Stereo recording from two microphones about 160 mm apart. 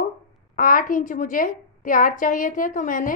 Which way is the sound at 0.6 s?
60° left (ahead or behind).